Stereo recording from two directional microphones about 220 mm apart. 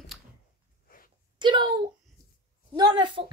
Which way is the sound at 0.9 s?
40° left (ahead or behind).